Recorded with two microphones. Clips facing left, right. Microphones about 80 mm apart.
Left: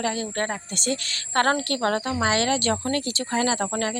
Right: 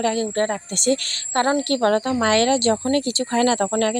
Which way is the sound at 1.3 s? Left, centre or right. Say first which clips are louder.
Right 2 dB; left.